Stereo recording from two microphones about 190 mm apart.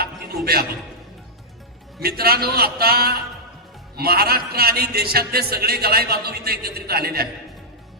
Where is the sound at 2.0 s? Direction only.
55° right (ahead or behind).